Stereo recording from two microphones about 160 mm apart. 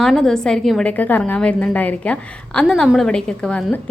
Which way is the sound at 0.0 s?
Centre (ahead or behind).